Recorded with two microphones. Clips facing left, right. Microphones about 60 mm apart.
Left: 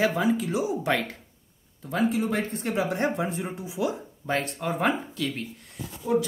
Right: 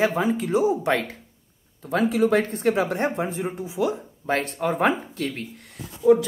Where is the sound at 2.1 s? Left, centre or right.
Right.